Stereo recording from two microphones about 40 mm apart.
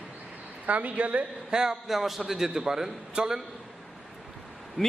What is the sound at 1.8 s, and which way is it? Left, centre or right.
A man's voice, centre.